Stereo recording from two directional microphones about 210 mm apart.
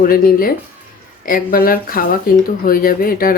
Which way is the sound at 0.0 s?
45° left (ahead or behind).